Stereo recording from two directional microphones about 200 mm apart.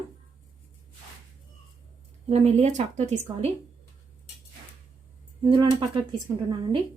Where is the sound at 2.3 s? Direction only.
30° right (ahead or behind).